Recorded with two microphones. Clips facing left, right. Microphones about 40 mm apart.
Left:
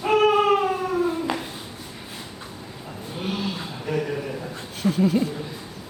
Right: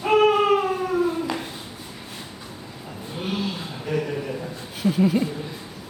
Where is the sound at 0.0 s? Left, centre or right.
Centre.